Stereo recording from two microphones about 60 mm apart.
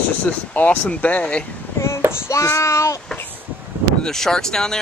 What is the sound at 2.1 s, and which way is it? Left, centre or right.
Speech, left.